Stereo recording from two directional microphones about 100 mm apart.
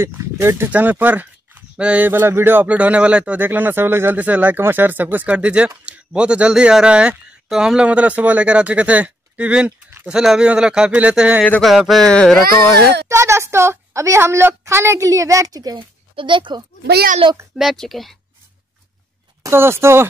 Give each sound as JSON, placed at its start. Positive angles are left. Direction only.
{"t": 0.0, "sound": "a woman's voice", "side_deg": -25}
{"t": 9.7, "sound": "a sound", "side_deg": -25}
{"t": 10.0, "sound": "speech", "side_deg": -5}
{"t": 11.6, "sound": "speech", "side_deg": 0}
{"t": 13.1, "sound": "a woman's voice", "side_deg": -25}
{"t": 16.2, "sound": "speech", "side_deg": -55}
{"t": 17.6, "sound": "speech", "side_deg": 0}
{"t": 19.4, "sound": "a woman's voice", "side_deg": -25}